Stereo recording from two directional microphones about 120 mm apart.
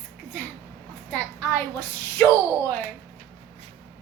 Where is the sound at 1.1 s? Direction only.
10° left (ahead or behind).